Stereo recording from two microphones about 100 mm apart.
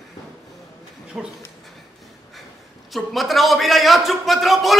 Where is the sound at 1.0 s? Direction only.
10° right (ahead or behind).